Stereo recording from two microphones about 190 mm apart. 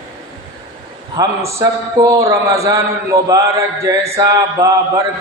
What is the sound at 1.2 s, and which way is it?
A man's voice, 20° right (ahead or behind).